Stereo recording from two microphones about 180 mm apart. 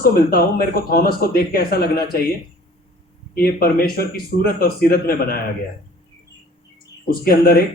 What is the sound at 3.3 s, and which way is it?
Speech, 55° left (ahead or behind).